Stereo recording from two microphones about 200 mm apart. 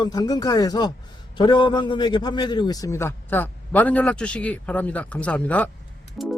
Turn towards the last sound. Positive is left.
turn(degrees=0)  # may be behind; listen again after turning